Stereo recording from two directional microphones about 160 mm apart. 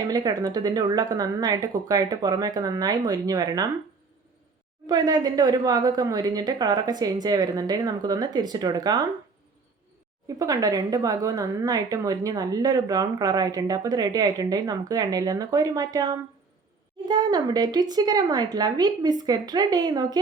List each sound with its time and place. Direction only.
0.1 s a woman's voice: 25° right (ahead or behind)
4.9 s a woman's voice: 25° right (ahead or behind)
10.2 s a woman's voice: 20° right (ahead or behind)